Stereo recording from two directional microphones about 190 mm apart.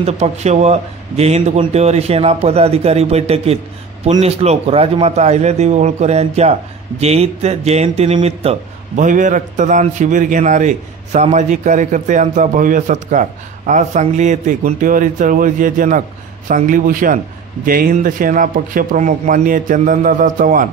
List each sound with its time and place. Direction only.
0.0 s speech: 35° right (ahead or behind)